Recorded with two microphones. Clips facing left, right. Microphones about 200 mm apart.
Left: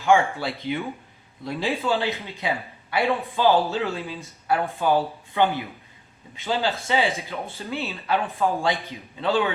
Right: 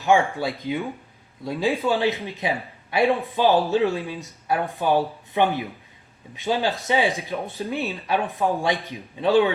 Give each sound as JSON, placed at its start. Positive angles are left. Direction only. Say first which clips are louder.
{"t": 0.0, "sound": "speech", "louder": "even", "side_deg": -15}